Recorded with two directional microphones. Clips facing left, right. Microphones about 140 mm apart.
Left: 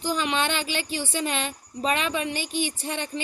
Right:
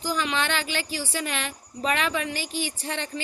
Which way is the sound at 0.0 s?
20° left (ahead or behind).